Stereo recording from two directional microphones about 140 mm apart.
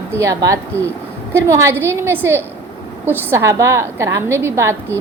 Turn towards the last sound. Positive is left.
turn(degrees=-20)  # may be behind; listen again after turning